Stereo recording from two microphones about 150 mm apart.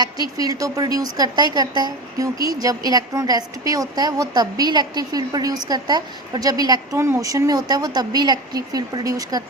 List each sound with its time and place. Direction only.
0.0 s a woman's voice: 25° right (ahead or behind)